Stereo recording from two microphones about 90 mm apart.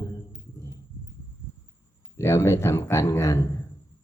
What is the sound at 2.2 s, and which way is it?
Speech, 30° left (ahead or behind).